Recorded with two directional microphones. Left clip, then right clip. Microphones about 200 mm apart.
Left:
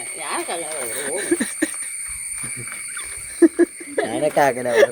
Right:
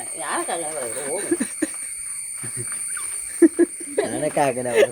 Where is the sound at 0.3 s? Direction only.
20° right (ahead or behind).